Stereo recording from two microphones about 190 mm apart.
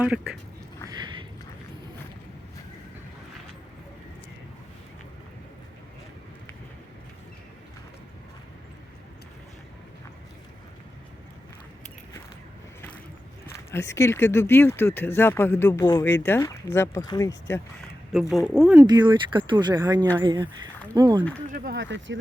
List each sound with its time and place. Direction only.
0.0 s speech: 5° right (ahead or behind)
0.9 s a sound: 20° right (ahead or behind)
13.7 s speech: 15° left (ahead or behind)
18.1 s speech: centre (ahead or behind)
18.8 s speech: 25° right (ahead or behind)
21.5 s speech: 50° right (ahead or behind)
21.8 s speech: 70° right (ahead or behind)